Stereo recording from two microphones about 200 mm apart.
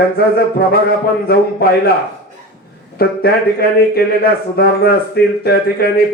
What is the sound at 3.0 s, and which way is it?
A man's voice, 50° left (ahead or behind).